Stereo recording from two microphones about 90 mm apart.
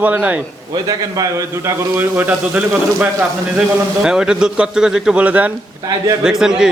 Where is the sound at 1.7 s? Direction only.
25° right (ahead or behind).